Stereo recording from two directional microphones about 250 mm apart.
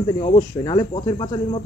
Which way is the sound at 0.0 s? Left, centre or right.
Centre.